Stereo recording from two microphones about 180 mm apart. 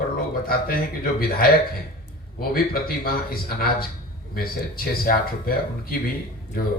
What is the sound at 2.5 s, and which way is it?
Speech, 55° left (ahead or behind).